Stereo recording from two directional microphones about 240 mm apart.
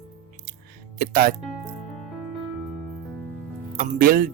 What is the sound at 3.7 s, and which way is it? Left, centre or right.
Speech, right.